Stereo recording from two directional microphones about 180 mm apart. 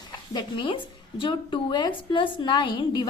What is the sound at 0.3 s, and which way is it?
A woman's voice, 30° left (ahead or behind).